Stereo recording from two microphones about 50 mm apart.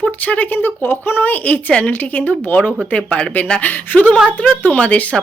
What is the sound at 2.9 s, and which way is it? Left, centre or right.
Speech, left.